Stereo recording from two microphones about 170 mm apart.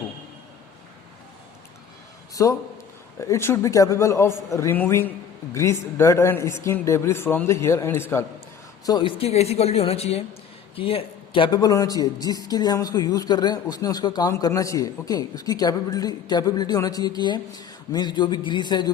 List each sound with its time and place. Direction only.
2.3 s a man's voice: 20° left (ahead or behind)
8.9 s a man's voice: 30° left (ahead or behind)